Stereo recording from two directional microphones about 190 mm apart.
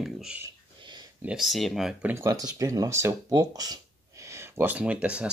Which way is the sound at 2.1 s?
15° right (ahead or behind).